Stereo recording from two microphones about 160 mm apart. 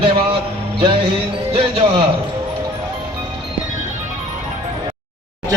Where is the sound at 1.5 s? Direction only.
35° right (ahead or behind).